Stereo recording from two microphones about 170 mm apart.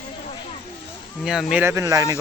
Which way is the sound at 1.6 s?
20° right (ahead or behind).